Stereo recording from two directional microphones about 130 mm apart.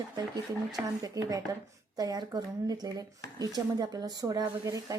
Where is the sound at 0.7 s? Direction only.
30° right (ahead or behind).